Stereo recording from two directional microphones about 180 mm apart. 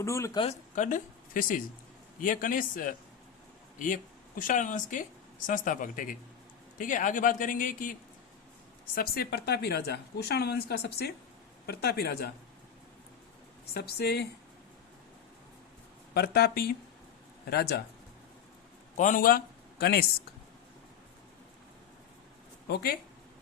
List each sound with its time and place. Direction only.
0.0 s speech: 15° left (ahead or behind)
0.8 s a man's voice: 45° left (ahead or behind)
9.0 s speech: 60° left (ahead or behind)
13.7 s speech: 65° left (ahead or behind)
16.1 s speech: 60° left (ahead or behind)
18.9 s a man's voice: 45° left (ahead or behind); by 20.1 s 60° left (ahead or behind)
22.7 s speech: 60° left (ahead or behind)